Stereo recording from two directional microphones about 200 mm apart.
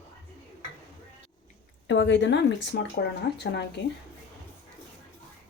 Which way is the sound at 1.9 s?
65° left (ahead or behind).